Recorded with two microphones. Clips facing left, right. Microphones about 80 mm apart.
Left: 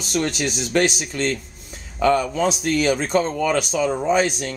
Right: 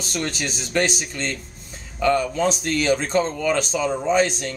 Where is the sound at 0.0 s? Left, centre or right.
Centre.